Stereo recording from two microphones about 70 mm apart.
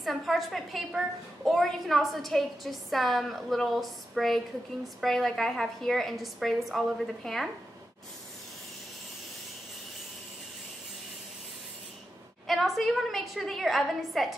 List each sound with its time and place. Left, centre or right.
0.0 s a woman's voice: centre
12.4 s a woman's voice: centre